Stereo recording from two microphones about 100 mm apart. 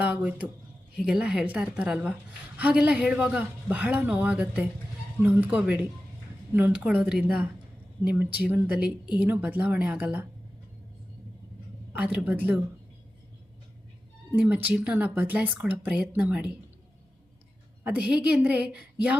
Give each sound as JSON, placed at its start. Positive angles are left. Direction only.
{"t": 0.0, "sound": "speech", "side_deg": -15}
{"t": 11.9, "sound": "speech", "side_deg": -15}
{"t": 14.3, "sound": "speech", "side_deg": -15}
{"t": 17.8, "sound": "speech", "side_deg": -15}